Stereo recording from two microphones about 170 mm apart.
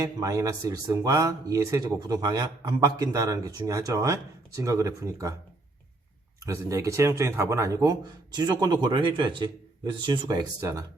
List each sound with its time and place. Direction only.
0.0 s speech: 20° right (ahead or behind)
6.4 s speech: 20° right (ahead or behind)